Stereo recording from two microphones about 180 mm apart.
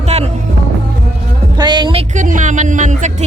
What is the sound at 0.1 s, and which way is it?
Music, 35° right (ahead or behind).